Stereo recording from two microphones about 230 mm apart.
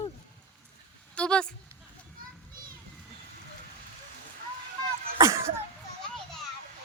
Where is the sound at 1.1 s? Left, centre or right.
Centre.